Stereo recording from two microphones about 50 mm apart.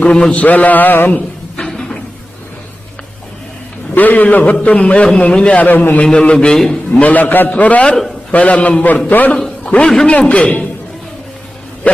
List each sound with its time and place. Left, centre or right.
0.0 s a man's voice: left
1.6 s cupboard open or close: centre
3.9 s a man's voice: left
6.1 s a man's voice: centre
6.9 s a man's voice: left
7.9 s a man's voice: centre
8.3 s a man's voice: left
9.8 s a man's voice: centre
10.2 s a man's voice: left